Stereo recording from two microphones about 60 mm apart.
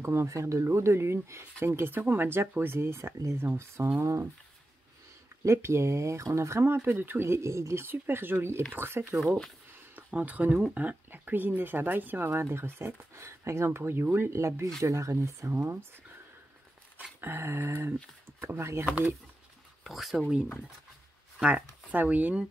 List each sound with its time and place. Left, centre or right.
0.0 s speech: right
5.4 s speech: right
7.8 s speech: right
9.9 s speech: right
12.3 s speech: right
14.3 s speech: right
17.2 s speech: right
19.9 s speech: centre
21.4 s speech: centre
21.8 s speech: right